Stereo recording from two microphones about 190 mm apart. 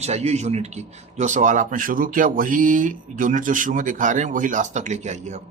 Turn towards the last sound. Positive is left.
turn(degrees=-40)  # may be behind; listen again after turning